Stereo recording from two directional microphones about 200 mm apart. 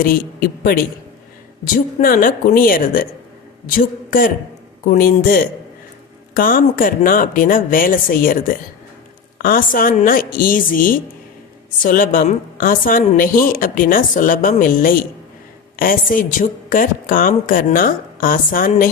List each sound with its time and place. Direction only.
0.0 s a woman's voice: 45° left (ahead or behind)